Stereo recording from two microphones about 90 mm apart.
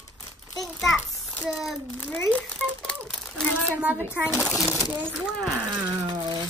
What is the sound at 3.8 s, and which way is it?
Speech, 20° right (ahead or behind).